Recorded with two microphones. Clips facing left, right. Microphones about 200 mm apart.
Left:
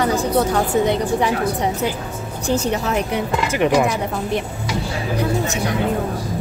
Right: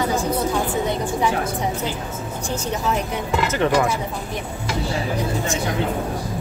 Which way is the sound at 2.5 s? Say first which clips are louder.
Left 5 dB; 70° left (ahead or behind).